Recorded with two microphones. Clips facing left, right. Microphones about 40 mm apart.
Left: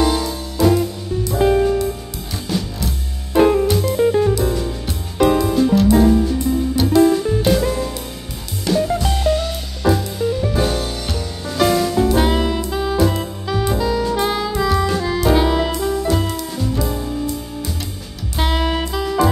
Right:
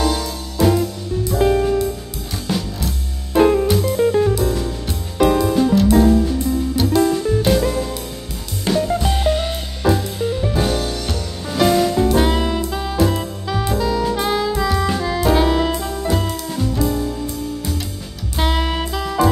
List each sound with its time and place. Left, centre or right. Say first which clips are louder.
0.6 s music: left 1 dB; centre
3.3 s music: even; centre
8.7 s music: left 1 dB; centre
9.1 s music: even; right
9.8 s music: left 1 dB; centre
12.1 s saxophone: even; centre
16.1 s music: left 1 dB; centre
18.3 s music: left 1 dB; centre